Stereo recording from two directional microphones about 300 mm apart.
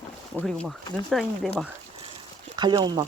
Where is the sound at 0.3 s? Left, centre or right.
Centre.